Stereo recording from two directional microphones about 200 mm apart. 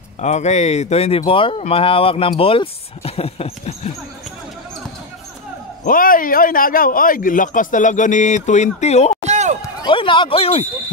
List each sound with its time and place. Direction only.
0.2 s speech: 35° left (ahead or behind)
5.9 s a man's voice: 45° left (ahead or behind)
9.2 s run: 35° right (ahead or behind)
9.6 s speech: 20° left (ahead or behind)